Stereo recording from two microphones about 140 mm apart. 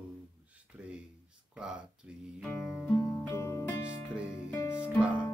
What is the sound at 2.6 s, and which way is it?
Music, 5° left (ahead or behind).